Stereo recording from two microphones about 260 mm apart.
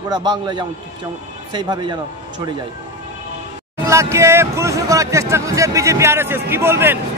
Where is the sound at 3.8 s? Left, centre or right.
Centre.